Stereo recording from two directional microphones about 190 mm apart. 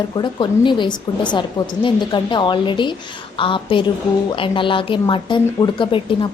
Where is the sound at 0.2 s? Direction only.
25° left (ahead or behind).